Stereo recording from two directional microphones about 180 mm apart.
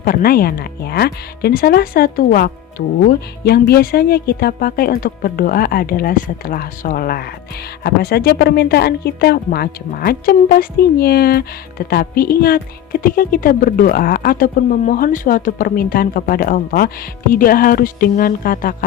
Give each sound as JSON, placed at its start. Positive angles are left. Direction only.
{"t": 0.0, "sound": "a woman's voice", "side_deg": 55}